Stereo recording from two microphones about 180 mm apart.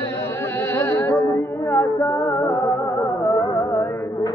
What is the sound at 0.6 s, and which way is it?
Music, 15° left (ahead or behind).